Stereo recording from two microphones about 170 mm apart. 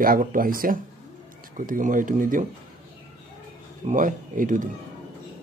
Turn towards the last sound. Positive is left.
turn(degrees=-50)  # may be behind; listen again after turning